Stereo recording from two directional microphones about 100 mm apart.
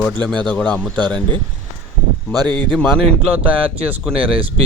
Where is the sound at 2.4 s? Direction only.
45° right (ahead or behind).